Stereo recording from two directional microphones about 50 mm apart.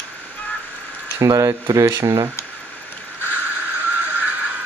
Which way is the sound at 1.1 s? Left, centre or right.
Right.